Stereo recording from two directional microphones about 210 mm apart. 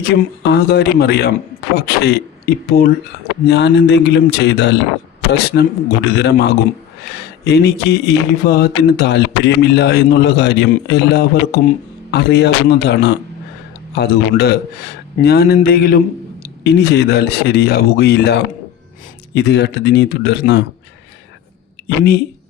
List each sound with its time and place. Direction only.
0.0 s speech: 50° left (ahead or behind)
21.8 s speech: 50° left (ahead or behind)